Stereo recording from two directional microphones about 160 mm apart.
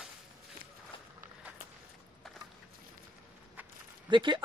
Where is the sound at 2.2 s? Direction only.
Centre (ahead or behind).